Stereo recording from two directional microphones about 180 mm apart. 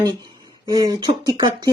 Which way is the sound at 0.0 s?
25° right (ahead or behind).